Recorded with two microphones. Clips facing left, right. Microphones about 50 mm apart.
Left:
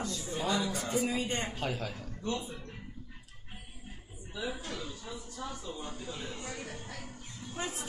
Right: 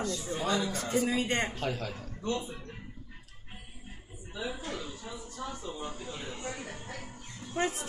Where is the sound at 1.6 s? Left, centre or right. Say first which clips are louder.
Right 1 dB; centre.